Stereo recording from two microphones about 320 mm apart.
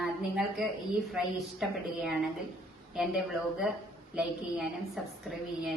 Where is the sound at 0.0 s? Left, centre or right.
Centre.